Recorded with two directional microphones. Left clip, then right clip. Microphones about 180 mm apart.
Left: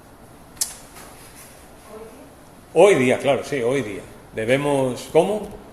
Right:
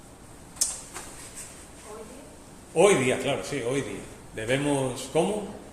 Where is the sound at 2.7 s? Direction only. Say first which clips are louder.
Left 6 dB; 40° left (ahead or behind).